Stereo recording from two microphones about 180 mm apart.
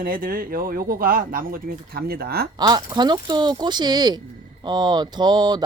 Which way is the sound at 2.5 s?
25° right (ahead or behind).